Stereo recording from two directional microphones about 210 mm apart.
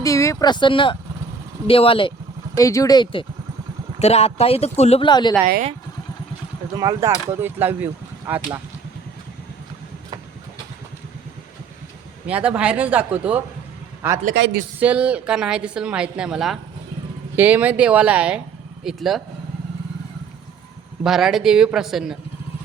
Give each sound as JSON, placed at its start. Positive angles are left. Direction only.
{"t": 0.0, "sound": "speech", "side_deg": 15}
{"t": 6.7, "sound": "speech", "side_deg": -15}
{"t": 12.3, "sound": "speech", "side_deg": -5}
{"t": 14.3, "sound": "a woman's voice", "side_deg": -55}
{"t": 14.8, "sound": "a woman's voice", "side_deg": -5}
{"t": 21.0, "sound": "a woman's voice", "side_deg": 0}